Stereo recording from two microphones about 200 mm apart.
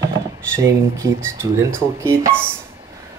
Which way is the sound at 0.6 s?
15° right (ahead or behind).